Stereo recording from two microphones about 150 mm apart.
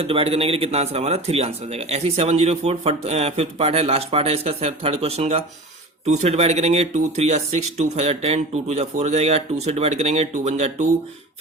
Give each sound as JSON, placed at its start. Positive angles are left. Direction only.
{"t": 0.0, "sound": "speech", "side_deg": -40}